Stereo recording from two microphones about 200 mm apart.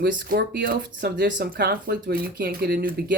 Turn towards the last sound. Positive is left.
turn(degrees=-45)  # may be behind; listen again after turning